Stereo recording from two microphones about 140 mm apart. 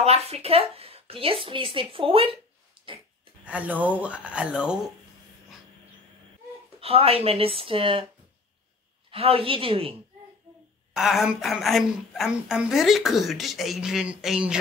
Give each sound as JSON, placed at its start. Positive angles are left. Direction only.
{"t": 0.0, "sound": "a woman's voice", "side_deg": -50}
{"t": 3.4, "sound": "speech", "side_deg": -10}
{"t": 6.8, "sound": "a woman's voice", "side_deg": -45}
{"t": 9.1, "sound": "speech", "side_deg": -45}
{"t": 11.0, "sound": "a woman's voice", "side_deg": -5}